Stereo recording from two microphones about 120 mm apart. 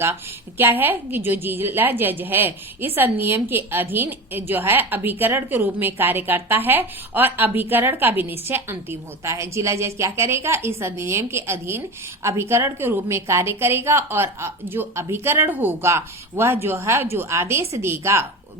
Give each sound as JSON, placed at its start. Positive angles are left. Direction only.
{"t": 0.0, "sound": "a woman's voice", "side_deg": -20}